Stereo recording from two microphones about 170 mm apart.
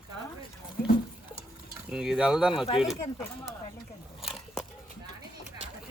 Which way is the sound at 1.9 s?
5° right (ahead or behind).